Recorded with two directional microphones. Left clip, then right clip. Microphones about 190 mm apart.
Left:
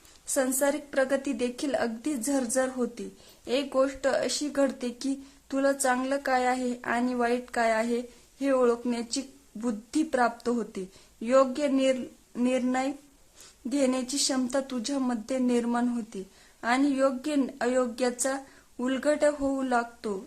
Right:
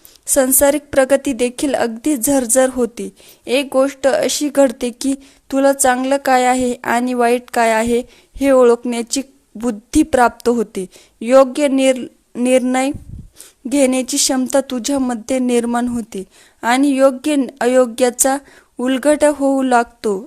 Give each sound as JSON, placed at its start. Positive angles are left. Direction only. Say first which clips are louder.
{"t": 0.3, "sound": "a woman's voice", "louder": "right 13 dB", "side_deg": -40}